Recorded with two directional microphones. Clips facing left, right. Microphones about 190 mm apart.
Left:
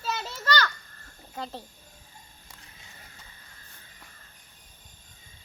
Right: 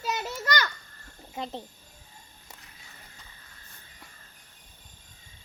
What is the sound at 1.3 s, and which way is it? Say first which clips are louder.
Speech: right 2 dB; 20° right (ahead or behind).